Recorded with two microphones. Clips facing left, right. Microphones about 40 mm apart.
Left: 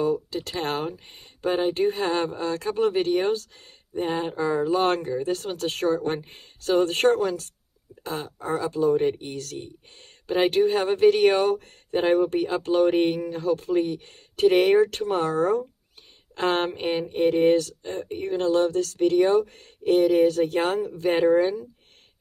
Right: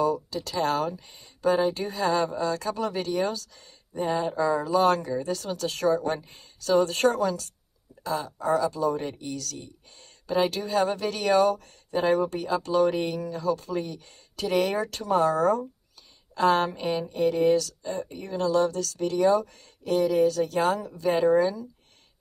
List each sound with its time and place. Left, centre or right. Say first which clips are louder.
0.0 s speech: left 1 dB; left